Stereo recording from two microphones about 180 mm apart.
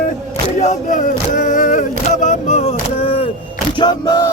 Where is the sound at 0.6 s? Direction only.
45° left (ahead or behind).